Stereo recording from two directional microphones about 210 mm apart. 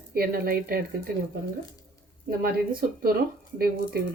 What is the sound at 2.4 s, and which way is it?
Speech, 50° right (ahead or behind).